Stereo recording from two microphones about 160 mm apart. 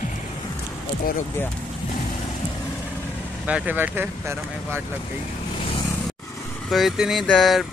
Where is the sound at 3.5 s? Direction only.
10° right (ahead or behind).